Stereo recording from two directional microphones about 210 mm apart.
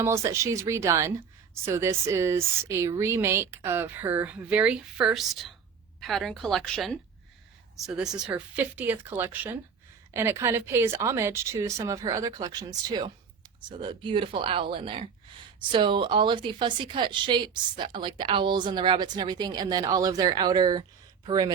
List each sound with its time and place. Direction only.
0.0 s a woman's voice: 15° right (ahead or behind); by 7.0 s 5° left (ahead or behind)
8.2 s a woman's voice: 5° right (ahead or behind)